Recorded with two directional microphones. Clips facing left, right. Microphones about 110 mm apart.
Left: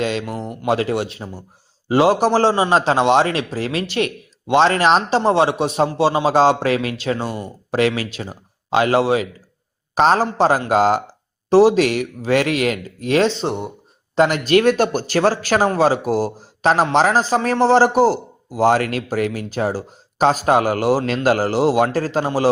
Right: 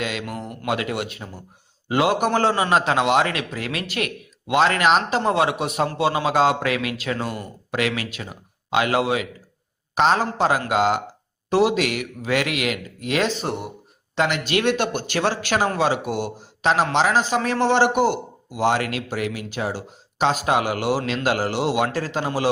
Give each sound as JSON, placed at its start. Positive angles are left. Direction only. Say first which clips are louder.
{"t": 0.0, "sound": "a man's voice", "louder": "left 6 dB", "side_deg": 35}
{"t": 14.2, "sound": "a man's voice", "louder": "left 7 dB", "side_deg": 40}